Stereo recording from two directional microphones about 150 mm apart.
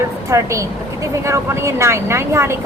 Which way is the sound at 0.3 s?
20° right (ahead or behind).